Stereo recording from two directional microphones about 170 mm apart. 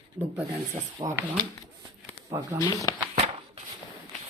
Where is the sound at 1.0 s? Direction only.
30° right (ahead or behind).